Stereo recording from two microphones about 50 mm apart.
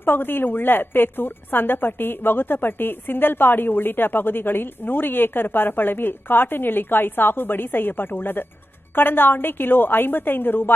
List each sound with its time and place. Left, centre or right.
0.0 s a woman's voice: left